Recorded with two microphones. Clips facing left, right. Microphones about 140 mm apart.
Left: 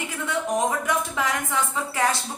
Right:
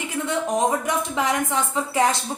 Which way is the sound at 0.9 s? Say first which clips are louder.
Right 2 dB; 20° right (ahead or behind).